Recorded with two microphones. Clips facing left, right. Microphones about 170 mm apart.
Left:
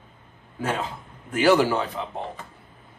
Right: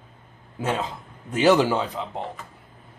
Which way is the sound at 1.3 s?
20° right (ahead or behind).